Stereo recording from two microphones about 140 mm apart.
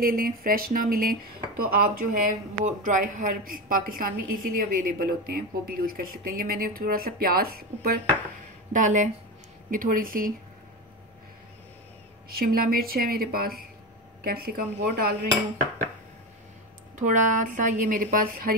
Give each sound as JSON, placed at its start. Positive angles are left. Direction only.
{"t": 0.0, "sound": "a woman's voice", "side_deg": -90}
{"t": 2.6, "sound": "a woman's voice", "side_deg": -65}
{"t": 8.7, "sound": "speech", "side_deg": -65}
{"t": 9.7, "sound": "speech", "side_deg": -75}
{"t": 12.3, "sound": "a woman's voice", "side_deg": -90}
{"t": 17.0, "sound": "a woman's voice", "side_deg": -65}